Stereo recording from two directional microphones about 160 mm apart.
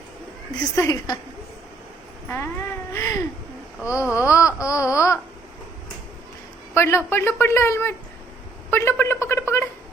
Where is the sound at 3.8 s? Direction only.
5° right (ahead or behind).